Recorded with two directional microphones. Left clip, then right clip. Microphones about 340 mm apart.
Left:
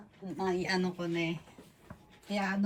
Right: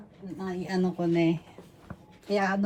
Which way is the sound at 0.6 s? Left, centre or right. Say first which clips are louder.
Right 4 dB; centre.